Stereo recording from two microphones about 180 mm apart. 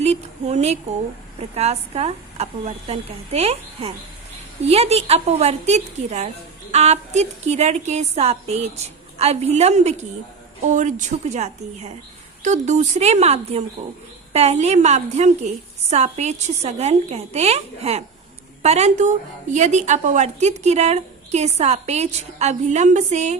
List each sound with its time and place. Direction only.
0.0 s a woman's voice: 35° right (ahead or behind)